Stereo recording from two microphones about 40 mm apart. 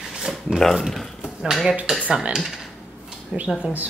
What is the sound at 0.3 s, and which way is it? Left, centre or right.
Speech, centre.